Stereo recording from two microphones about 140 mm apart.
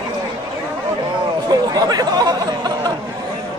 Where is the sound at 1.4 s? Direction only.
30° right (ahead or behind).